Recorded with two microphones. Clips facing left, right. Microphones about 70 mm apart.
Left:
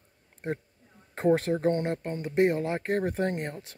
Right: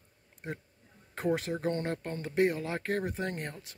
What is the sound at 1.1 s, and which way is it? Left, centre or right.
Speech, left.